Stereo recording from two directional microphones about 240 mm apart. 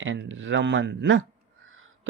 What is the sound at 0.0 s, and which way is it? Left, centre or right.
Speech, right.